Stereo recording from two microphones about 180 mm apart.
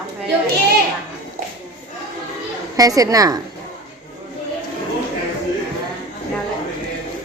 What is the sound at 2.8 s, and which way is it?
Speech, 20° right (ahead or behind).